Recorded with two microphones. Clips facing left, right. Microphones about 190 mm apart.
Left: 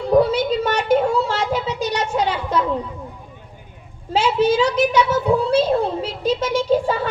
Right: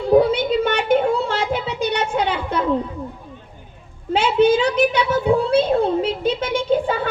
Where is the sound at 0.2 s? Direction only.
55° right (ahead or behind).